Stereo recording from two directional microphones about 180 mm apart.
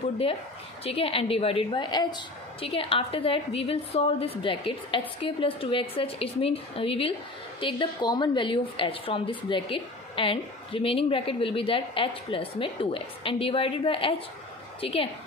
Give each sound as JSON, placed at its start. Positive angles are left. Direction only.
{"t": 0.8, "sound": "speech", "side_deg": 30}